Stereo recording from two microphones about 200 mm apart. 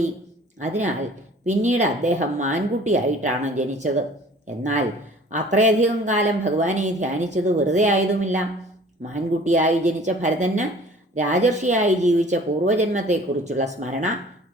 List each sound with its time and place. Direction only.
0.6 s a woman's voice: 35° right (ahead or behind)